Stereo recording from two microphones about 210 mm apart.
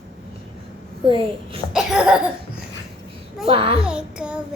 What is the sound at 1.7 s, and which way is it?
Child singing, 5° right (ahead or behind).